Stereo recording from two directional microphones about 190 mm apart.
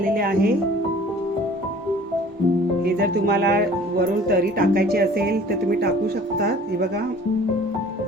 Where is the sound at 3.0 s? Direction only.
55° right (ahead or behind).